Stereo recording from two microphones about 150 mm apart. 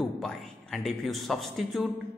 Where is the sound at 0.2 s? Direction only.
Centre (ahead or behind).